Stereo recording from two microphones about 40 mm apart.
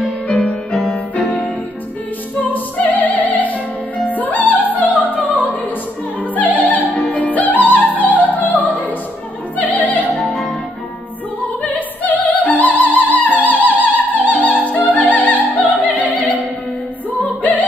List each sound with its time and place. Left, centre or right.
1.1 s music: left
2.4 s opera: left
4.0 s music: left
6.3 s opera: left
9.6 s music: left
11.6 s music: left
14.3 s opera: left